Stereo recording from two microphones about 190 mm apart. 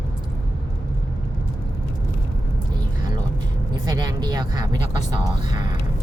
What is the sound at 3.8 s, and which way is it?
Speech, 20° right (ahead or behind).